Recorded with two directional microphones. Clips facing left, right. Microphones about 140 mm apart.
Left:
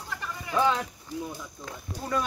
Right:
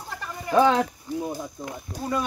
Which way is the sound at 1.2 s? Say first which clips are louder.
Right 7 dB; 40° right (ahead or behind).